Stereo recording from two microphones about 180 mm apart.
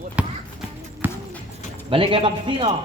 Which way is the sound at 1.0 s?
10° right (ahead or behind).